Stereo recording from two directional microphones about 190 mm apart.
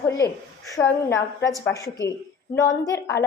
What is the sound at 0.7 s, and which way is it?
Speech, 15° left (ahead or behind).